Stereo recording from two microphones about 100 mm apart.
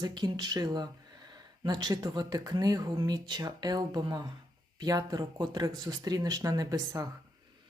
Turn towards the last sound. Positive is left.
turn(degrees=-35)  # may be behind; listen again after turning